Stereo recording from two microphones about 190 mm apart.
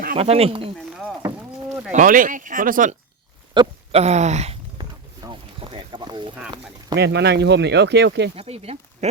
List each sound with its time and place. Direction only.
0.2 s speech: 30° right (ahead or behind)
1.9 s speech: 45° right (ahead or behind)
3.5 s speech: 30° right (ahead or behind)
4.8 s a sound: 25° right (ahead or behind)
6.9 s speech: 60° right (ahead or behind)
8.4 s speech: 35° right (ahead or behind)